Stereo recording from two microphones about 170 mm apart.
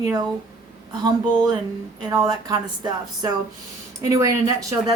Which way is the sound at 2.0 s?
20° right (ahead or behind).